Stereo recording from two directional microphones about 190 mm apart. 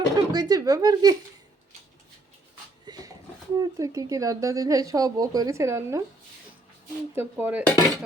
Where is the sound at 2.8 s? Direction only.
20° right (ahead or behind).